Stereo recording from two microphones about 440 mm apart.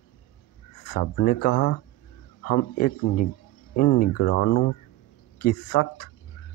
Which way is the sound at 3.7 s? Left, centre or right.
Left.